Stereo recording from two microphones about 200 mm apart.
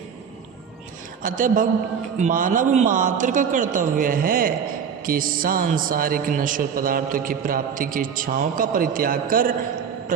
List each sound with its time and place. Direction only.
1.2 s a man's voice: 40° right (ahead or behind)